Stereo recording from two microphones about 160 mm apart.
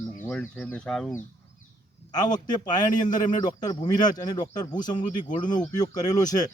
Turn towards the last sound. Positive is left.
turn(degrees=25)  # may be behind; listen again after turning